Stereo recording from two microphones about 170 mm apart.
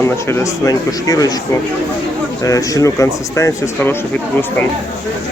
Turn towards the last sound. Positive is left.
turn(degrees=15)  # may be behind; listen again after turning